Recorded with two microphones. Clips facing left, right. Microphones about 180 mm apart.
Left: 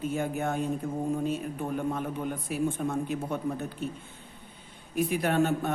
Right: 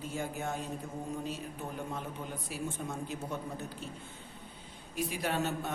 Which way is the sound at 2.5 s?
60° left (ahead or behind).